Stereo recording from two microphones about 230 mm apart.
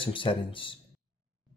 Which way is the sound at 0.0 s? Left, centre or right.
Left.